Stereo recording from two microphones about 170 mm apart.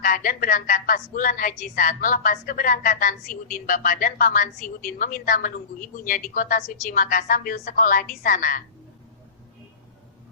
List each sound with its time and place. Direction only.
0.0 s a woman's voice: 55° left (ahead or behind)